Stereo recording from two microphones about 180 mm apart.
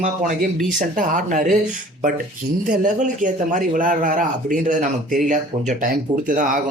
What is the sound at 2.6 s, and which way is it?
A man's voice, 45° right (ahead or behind).